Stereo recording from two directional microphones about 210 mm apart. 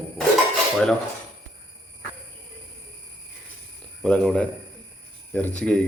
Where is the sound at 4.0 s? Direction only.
5° left (ahead or behind).